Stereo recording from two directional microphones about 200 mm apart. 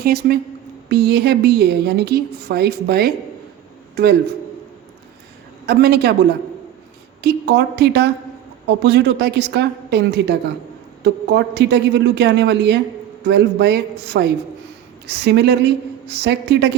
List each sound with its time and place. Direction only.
0.0 s a woman's voice: 50° right (ahead or behind)
5.6 s a woman's voice: 55° right (ahead or behind)
7.2 s a man's voice: 55° right (ahead or behind)